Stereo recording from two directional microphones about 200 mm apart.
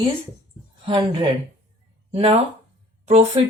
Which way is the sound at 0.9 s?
25° right (ahead or behind).